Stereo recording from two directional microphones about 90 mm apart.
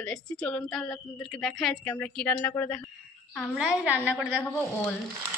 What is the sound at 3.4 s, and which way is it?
Speech, 10° right (ahead or behind).